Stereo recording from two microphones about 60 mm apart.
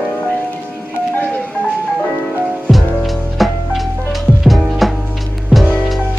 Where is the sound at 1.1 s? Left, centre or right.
Left.